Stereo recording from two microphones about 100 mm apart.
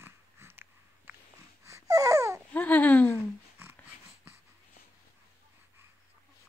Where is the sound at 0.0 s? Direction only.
25° right (ahead or behind).